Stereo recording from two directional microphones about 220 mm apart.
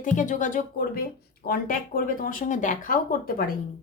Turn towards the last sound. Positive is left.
turn(degrees=40)  # may be behind; listen again after turning